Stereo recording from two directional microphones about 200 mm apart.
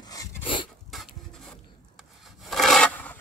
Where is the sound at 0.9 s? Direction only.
Centre (ahead or behind).